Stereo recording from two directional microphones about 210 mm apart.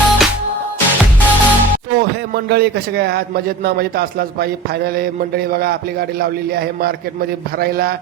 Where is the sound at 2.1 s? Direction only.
50° right (ahead or behind).